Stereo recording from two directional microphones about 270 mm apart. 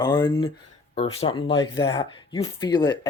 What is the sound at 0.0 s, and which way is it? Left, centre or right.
Speech, centre.